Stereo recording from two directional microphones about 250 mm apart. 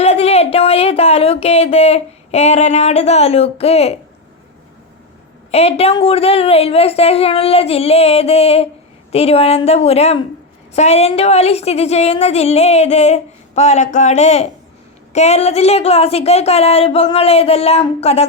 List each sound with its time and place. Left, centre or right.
0.0 s speech: left
5.5 s a woman's voice: left